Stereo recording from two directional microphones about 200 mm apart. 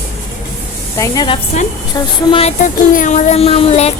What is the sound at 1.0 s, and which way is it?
Speech, 20° left (ahead or behind).